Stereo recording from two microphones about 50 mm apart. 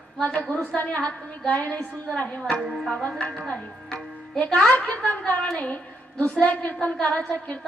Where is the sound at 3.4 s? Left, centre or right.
Centre.